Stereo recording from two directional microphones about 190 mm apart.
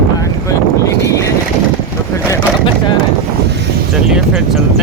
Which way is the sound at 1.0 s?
15° left (ahead or behind).